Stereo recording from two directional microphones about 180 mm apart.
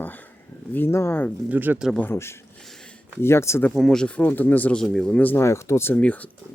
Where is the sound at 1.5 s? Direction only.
10° right (ahead or behind).